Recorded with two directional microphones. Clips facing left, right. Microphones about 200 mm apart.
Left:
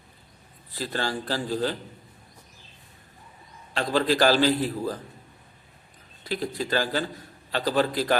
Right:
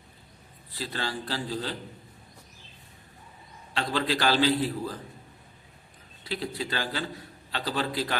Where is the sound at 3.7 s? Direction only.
45° left (ahead or behind).